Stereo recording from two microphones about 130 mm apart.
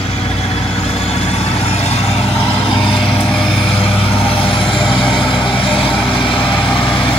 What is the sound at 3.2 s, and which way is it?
Vehicle, centre (ahead or behind).